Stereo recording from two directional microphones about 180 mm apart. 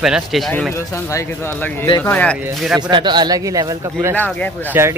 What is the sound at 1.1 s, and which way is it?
Speech, 15° left (ahead or behind).